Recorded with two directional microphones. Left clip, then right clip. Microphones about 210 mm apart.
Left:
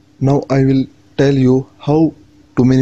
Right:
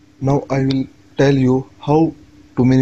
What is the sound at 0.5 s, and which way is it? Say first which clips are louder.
Speech: left 5 dB; 35° left (ahead or behind).